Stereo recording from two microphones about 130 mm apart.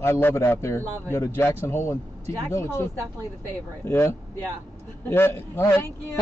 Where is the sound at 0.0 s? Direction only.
20° left (ahead or behind).